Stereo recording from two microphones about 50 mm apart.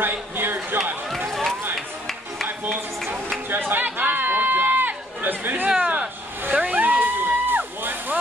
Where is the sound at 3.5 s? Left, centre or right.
Right.